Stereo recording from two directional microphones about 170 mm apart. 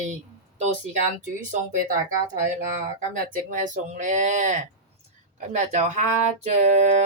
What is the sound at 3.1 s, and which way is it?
A woman's voice, 50° right (ahead or behind).